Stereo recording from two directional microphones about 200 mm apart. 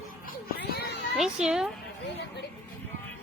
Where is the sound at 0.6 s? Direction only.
55° left (ahead or behind).